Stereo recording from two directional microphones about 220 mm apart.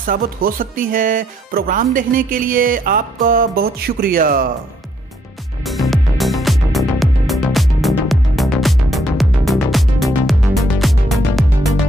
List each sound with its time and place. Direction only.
0.0 s speech: 40° right (ahead or behind)
5.6 s music: centre (ahead or behind)